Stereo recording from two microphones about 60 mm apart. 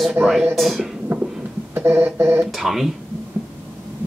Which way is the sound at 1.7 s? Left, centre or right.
Right.